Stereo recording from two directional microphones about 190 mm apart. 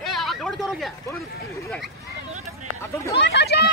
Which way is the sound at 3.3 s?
60° left (ahead or behind).